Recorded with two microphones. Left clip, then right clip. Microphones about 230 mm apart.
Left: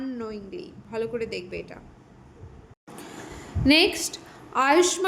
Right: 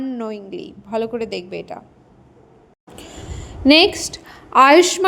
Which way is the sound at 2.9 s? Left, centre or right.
Right.